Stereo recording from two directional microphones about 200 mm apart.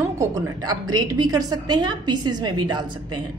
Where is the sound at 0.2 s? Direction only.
20° right (ahead or behind).